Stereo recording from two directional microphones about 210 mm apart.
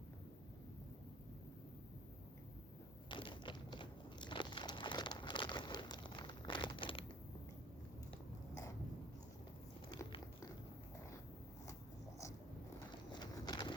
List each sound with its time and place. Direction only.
3.1 s biting: 25° left (ahead or behind)
9.9 s biting: 20° left (ahead or behind)
13.1 s bird: 20° left (ahead or behind)